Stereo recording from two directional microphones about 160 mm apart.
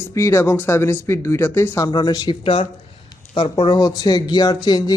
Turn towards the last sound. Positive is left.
turn(degrees=25)  # may be behind; listen again after turning